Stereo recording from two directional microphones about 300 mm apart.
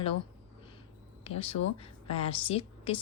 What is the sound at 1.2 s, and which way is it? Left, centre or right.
A woman's voice, centre.